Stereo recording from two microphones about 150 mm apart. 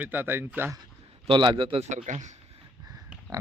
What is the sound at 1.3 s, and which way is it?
Speech, 30° right (ahead or behind).